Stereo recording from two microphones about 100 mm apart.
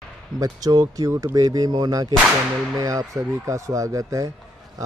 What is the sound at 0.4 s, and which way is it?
Speech, 35° right (ahead or behind).